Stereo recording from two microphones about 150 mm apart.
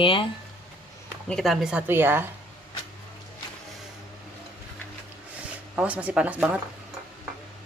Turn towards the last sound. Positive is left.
turn(degrees=-10)  # may be behind; listen again after turning